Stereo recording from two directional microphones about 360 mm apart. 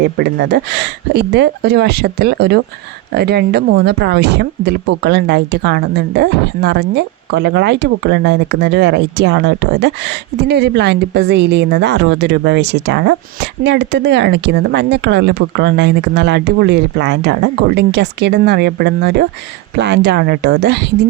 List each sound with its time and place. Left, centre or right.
0.0 s speech: right